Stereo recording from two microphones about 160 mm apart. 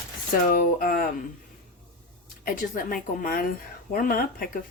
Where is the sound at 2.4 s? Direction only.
60° left (ahead or behind).